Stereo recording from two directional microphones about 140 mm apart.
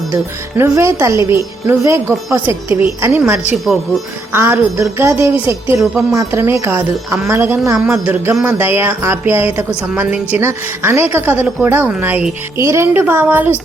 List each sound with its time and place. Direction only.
0.1 s a woman's voice: 15° right (ahead or behind)
3.5 s speech: centre (ahead or behind)
4.3 s a woman's voice: 15° right (ahead or behind)